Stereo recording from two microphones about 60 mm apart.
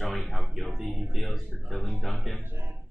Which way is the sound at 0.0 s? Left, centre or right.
Centre.